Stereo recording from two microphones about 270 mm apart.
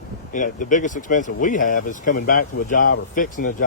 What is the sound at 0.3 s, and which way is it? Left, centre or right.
Speech, left.